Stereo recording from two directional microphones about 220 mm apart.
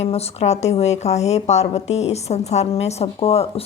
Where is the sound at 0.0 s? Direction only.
30° left (ahead or behind).